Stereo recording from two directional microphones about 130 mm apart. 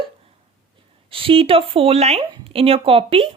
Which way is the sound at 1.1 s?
45° right (ahead or behind).